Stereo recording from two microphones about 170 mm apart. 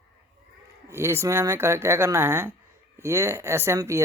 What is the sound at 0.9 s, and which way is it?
Speech, 15° right (ahead or behind).